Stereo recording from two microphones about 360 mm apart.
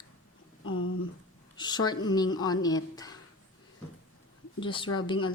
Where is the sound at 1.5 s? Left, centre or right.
Centre.